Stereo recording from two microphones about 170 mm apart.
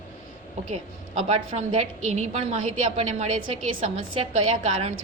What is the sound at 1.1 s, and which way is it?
A woman's voice, 40° right (ahead or behind).